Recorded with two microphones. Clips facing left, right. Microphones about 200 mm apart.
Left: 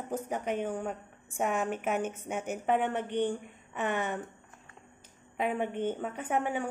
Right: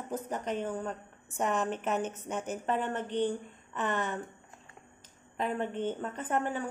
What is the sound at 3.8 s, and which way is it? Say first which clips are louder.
Speech: left 1 dB; 10° left (ahead or behind).